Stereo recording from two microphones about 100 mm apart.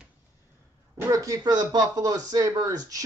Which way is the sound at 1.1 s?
35° right (ahead or behind).